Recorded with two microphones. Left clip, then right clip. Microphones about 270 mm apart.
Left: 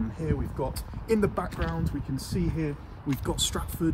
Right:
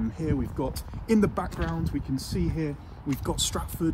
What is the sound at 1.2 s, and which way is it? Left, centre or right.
Speech, right.